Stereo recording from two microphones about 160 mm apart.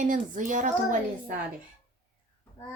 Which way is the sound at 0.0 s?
55° right (ahead or behind).